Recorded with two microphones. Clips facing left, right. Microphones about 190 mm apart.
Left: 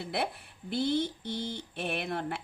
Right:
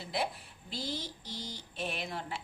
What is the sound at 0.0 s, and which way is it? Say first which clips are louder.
Speech: left 2 dB; 60° left (ahead or behind).